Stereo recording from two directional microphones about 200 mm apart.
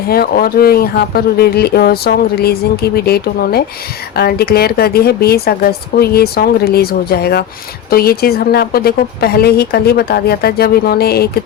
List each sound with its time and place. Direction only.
0.1 s speech: 50° left (ahead or behind)